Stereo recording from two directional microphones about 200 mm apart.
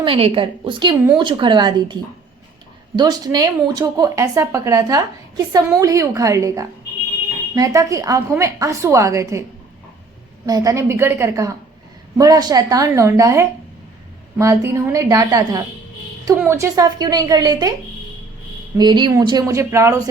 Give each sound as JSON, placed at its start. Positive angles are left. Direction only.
{"t": 0.0, "sound": "a woman's voice", "side_deg": -25}
{"t": 3.0, "sound": "a woman's voice", "side_deg": -20}
{"t": 10.4, "sound": "a woman's voice", "side_deg": -15}
{"t": 18.8, "sound": "a woman's voice", "side_deg": -25}